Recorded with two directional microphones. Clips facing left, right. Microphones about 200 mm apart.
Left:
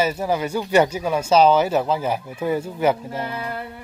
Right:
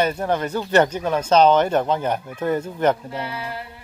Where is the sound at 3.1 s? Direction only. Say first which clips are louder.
Left 2 dB; 45° left (ahead or behind).